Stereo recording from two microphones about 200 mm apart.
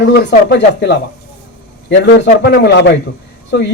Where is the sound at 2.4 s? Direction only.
60° left (ahead or behind).